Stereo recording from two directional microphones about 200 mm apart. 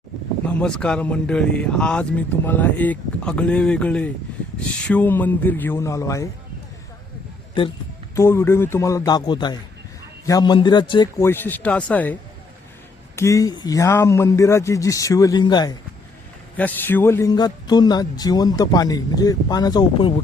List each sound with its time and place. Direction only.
0.6 s speech: 5° left (ahead or behind)
7.6 s speech: 25° left (ahead or behind)
8.1 s speech: 15° left (ahead or behind)
13.1 s speech: 15° left (ahead or behind)
16.6 s speech: 10° left (ahead or behind)